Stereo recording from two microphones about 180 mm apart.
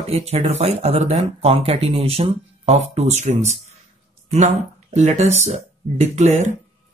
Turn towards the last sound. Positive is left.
turn(degrees=-40)  # may be behind; listen again after turning